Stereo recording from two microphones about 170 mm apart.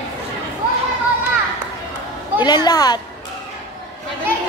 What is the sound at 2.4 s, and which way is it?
Speech, 25° left (ahead or behind).